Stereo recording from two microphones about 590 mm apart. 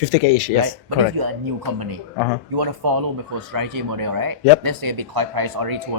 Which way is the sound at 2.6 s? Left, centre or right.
Right.